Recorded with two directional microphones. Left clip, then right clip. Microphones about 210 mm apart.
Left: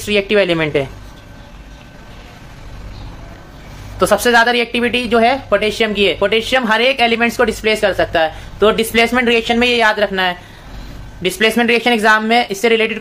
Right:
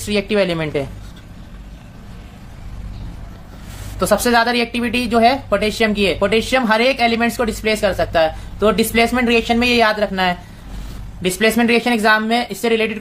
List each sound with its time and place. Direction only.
0.0 s a woman's voice: centre (ahead or behind)
4.0 s a woman's voice: centre (ahead or behind)